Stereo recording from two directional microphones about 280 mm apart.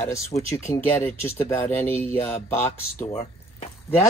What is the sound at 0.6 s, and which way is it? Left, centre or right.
Speech, centre.